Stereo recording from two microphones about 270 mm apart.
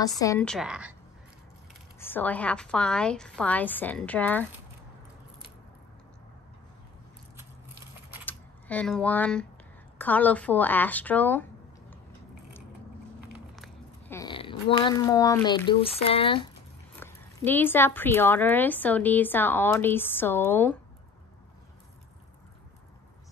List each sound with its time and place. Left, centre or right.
0.2 s a woman's voice: centre
2.0 s a woman's voice: centre
8.3 s speech: centre
13.2 s a sound: centre
16.9 s speech: centre